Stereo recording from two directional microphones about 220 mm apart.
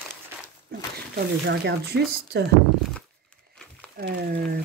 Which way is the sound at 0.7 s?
45° right (ahead or behind).